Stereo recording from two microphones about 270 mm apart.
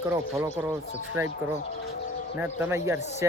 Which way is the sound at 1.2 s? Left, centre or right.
Centre.